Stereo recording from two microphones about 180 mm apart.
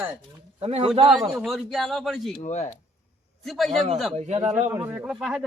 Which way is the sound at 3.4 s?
Centre (ahead or behind).